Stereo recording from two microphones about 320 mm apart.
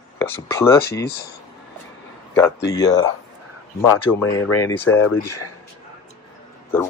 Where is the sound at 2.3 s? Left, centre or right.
Centre.